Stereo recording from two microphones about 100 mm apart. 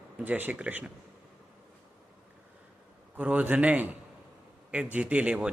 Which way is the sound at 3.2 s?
15° right (ahead or behind).